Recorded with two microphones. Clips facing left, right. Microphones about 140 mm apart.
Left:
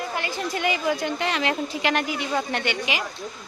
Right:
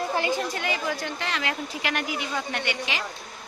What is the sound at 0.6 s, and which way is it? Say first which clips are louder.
A woman's voice: left 5 dB; 15° left (ahead or behind).